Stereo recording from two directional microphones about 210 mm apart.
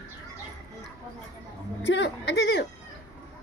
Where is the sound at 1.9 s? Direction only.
60° left (ahead or behind).